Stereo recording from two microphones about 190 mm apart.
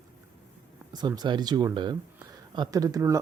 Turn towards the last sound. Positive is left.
turn(degrees=-15)  # may be behind; listen again after turning